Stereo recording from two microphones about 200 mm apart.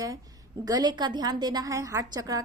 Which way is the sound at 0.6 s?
20° right (ahead or behind).